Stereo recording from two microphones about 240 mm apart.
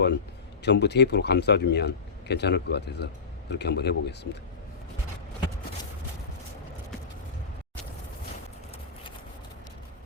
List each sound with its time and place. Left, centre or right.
0.6 s a man's voice: left